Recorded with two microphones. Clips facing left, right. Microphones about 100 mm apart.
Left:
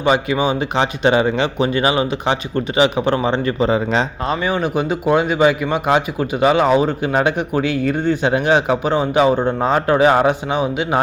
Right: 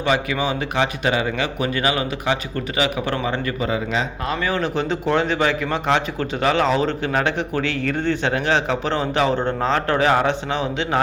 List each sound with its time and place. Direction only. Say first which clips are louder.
0.0 s speech: left 4 dB; 20° left (ahead or behind)
4.4 s a man's voice: left 2 dB; 15° left (ahead or behind)